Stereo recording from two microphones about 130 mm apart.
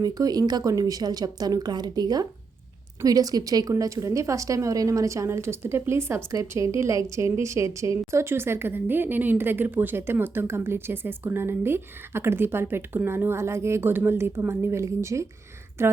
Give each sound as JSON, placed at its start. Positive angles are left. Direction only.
{"t": 0.0, "sound": "a woman's voice", "side_deg": -30}